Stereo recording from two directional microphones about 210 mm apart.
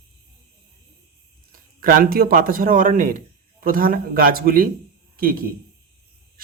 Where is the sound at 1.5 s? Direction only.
40° right (ahead or behind).